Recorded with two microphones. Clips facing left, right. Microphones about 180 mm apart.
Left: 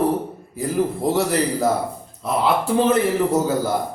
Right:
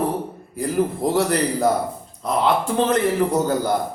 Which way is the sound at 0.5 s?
Centre (ahead or behind).